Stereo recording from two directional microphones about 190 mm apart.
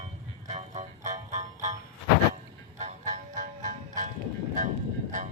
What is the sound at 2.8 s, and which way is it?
Music, 40° right (ahead or behind).